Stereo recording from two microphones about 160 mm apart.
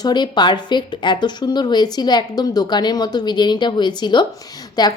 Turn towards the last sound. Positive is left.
turn(degrees=25)  # may be behind; listen again after turning